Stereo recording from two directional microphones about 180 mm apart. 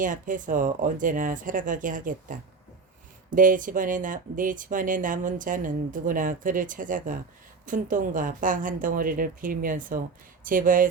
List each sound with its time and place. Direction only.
0.0 s speech: 45° right (ahead or behind)